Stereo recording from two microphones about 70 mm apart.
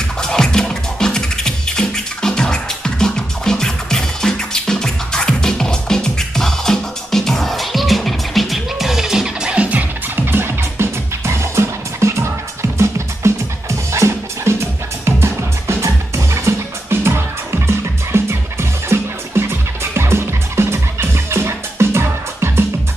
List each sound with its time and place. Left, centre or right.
0.2 s music: centre; by 22.7 s right